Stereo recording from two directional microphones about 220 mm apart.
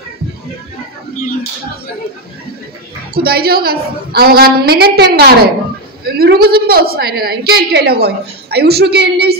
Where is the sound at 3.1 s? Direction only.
45° right (ahead or behind).